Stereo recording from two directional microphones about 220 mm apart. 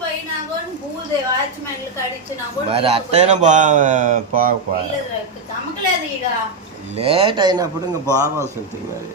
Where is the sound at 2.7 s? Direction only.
25° right (ahead or behind).